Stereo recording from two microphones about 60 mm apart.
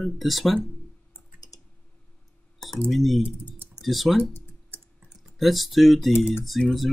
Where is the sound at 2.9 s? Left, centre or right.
Centre.